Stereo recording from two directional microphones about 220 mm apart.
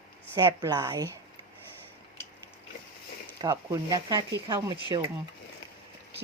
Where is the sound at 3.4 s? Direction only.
15° right (ahead or behind).